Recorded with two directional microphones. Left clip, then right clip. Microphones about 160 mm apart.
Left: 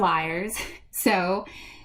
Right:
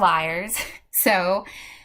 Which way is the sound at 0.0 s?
10° right (ahead or behind).